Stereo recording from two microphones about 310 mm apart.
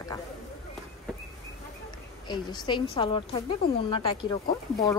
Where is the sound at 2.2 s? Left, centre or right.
Centre.